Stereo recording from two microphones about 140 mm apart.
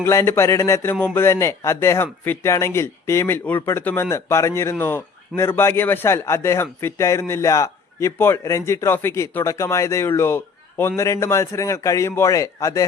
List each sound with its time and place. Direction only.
0.0 s speech: 20° left (ahead or behind)